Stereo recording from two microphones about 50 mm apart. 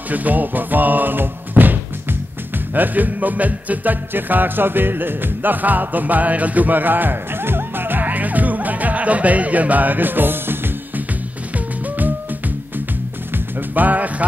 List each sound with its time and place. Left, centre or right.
0.1 s speech: right
2.7 s music: right
13.7 s music: right